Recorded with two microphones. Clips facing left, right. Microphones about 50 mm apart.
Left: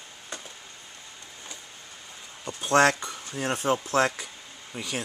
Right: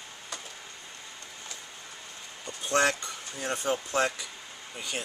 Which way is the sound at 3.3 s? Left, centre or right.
Left.